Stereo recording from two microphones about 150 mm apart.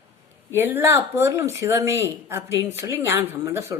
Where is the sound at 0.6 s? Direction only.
15° right (ahead or behind).